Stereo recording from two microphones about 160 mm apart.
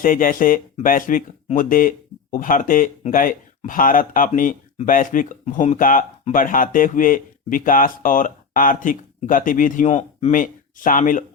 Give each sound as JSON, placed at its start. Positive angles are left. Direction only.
{"t": 0.0, "sound": "speech", "side_deg": 60}
{"t": 10.3, "sound": "speech", "side_deg": 55}